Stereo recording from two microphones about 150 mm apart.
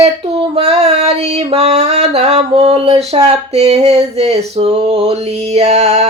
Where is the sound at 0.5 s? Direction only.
45° right (ahead or behind).